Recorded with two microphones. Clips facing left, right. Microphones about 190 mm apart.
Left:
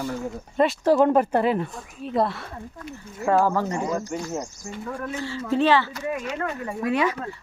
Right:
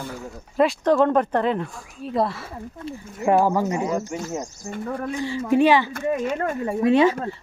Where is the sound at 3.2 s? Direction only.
15° right (ahead or behind).